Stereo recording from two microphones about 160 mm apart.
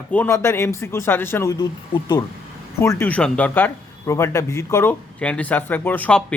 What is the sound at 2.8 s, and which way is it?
Speech, 15° left (ahead or behind).